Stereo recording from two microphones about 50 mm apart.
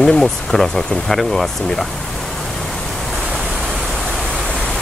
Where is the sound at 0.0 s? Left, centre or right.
Centre.